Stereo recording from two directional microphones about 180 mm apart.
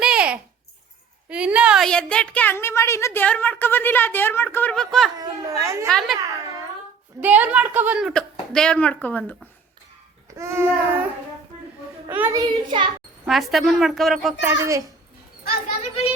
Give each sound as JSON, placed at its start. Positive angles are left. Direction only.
{"t": 0.0, "sound": "a sound", "side_deg": -5}
{"t": 1.3, "sound": "a woman's voice", "side_deg": -5}
{"t": 5.2, "sound": "a child's voice", "side_deg": -20}
{"t": 5.9, "sound": "a woman's voice", "side_deg": 0}
{"t": 7.2, "sound": "a woman's voice", "side_deg": -10}
{"t": 10.3, "sound": "a child's voice", "side_deg": -15}
{"t": 12.0, "sound": "a child's voice", "side_deg": -10}
{"t": 12.4, "sound": "a child's voice", "side_deg": -25}
{"t": 13.2, "sound": "a woman's voice", "side_deg": 0}
{"t": 14.4, "sound": "a child's voice", "side_deg": -15}